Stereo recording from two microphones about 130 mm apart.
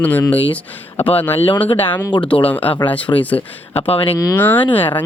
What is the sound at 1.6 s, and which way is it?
Speech, 45° left (ahead or behind).